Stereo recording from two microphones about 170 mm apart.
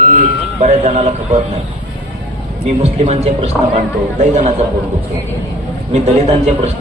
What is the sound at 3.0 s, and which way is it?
Speech, 40° right (ahead or behind).